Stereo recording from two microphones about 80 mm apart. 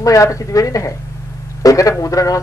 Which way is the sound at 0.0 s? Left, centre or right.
Left.